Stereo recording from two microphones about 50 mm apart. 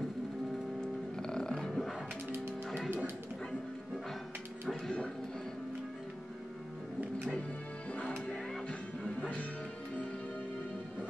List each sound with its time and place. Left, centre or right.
0.7 s music: centre
4.6 s music: centre
7.9 s music: left